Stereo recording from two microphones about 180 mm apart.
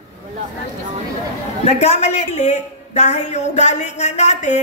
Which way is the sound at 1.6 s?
35° left (ahead or behind).